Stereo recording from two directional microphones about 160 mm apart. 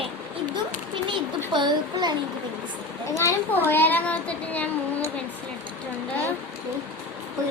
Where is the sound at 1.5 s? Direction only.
30° right (ahead or behind).